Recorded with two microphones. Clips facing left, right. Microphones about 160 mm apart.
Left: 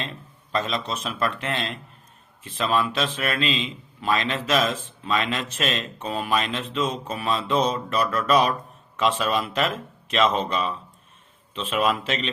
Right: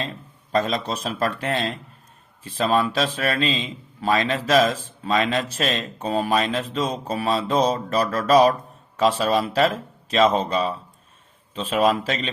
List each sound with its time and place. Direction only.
0.5 s a man's voice: 40° right (ahead or behind)